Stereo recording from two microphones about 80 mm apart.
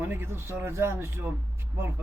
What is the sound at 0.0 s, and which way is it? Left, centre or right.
A man's voice, right.